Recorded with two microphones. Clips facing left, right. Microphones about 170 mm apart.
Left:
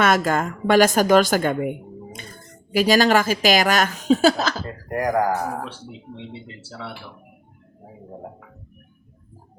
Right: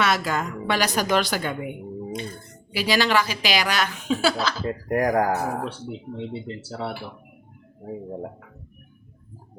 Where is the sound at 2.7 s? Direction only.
45° left (ahead or behind).